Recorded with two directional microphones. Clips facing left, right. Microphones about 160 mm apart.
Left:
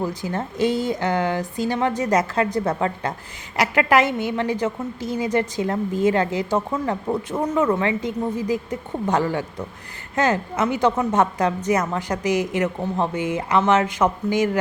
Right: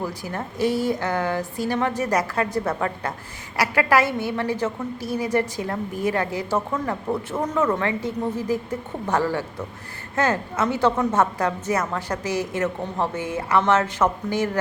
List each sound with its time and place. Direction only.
0.0 s a woman's voice: 20° left (ahead or behind)